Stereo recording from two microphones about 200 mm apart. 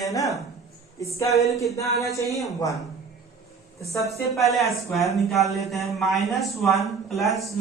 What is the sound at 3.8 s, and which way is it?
Speech, 15° left (ahead or behind).